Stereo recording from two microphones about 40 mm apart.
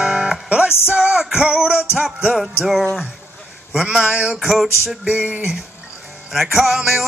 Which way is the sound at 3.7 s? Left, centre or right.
Right.